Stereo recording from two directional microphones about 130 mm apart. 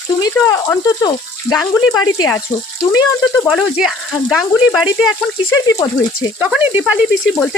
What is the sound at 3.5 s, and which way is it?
Speech, centre (ahead or behind).